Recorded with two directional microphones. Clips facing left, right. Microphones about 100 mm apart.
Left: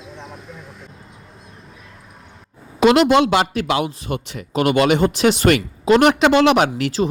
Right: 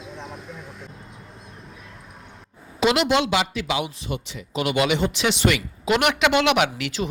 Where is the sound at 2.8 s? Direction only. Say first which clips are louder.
Left 7 dB; 50° left (ahead or behind).